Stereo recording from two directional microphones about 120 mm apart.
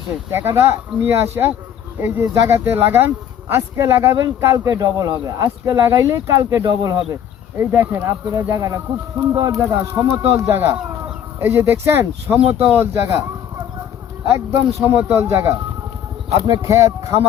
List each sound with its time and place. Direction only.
0.3 s speech: 20° right (ahead or behind)
7.6 s speech: 20° right (ahead or behind)
14.3 s speech: 25° right (ahead or behind)
16.6 s speech: 25° right (ahead or behind)